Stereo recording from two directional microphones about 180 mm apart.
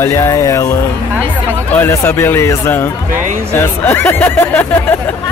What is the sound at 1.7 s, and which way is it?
Speech, 15° left (ahead or behind).